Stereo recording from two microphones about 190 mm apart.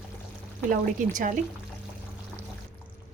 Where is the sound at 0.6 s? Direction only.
45° right (ahead or behind).